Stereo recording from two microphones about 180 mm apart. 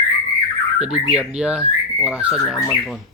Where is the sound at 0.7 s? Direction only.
5° right (ahead or behind).